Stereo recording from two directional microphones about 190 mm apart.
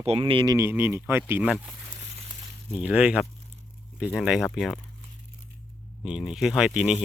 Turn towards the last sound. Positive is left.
turn(degrees=-5)  # may be behind; listen again after turning